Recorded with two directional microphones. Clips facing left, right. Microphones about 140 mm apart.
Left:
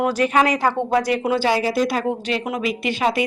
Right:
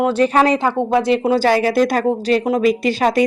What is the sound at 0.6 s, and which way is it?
Speech, 20° right (ahead or behind).